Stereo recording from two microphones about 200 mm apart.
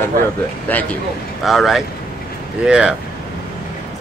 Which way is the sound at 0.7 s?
10° left (ahead or behind).